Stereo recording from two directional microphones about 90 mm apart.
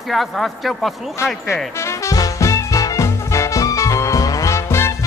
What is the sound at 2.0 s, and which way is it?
Music, 35° left (ahead or behind).